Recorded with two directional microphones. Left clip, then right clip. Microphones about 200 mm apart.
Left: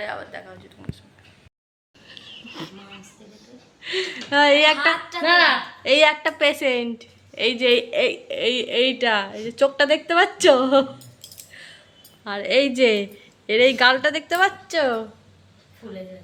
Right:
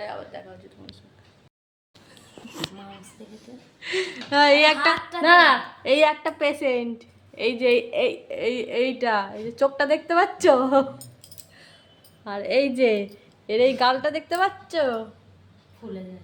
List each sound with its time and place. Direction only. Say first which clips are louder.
0.0 s a sound: left 3 dB; 10° right (ahead or behind)
2.5 s a sound: right 4 dB; 10° right (ahead or behind)
3.8 s a woman's voice: left 1 dB; 10° right (ahead or behind)
5.2 s a woman's voice: right 2 dB; 25° right (ahead or behind)
5.8 s a woman's voice: left 4 dB; 5° right (ahead or behind)
12.2 s a woman's voice: left 3 dB; centre (ahead or behind)